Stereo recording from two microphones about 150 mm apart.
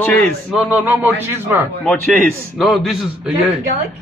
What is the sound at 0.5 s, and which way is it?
A man's voice, 10° right (ahead or behind).